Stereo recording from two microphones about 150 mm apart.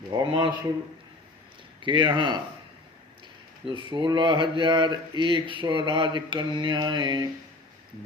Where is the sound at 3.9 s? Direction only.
30° right (ahead or behind).